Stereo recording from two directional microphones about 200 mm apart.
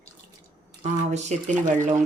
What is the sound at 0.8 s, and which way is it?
Speech, 35° right (ahead or behind).